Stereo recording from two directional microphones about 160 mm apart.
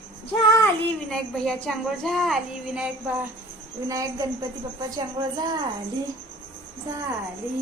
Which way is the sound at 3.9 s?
20° right (ahead or behind).